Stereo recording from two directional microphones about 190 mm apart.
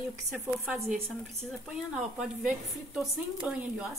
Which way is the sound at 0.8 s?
35° right (ahead or behind).